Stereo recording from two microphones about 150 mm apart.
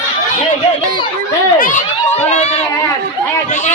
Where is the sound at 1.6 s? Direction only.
60° left (ahead or behind).